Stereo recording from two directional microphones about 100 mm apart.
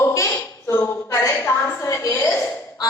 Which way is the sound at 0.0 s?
30° left (ahead or behind).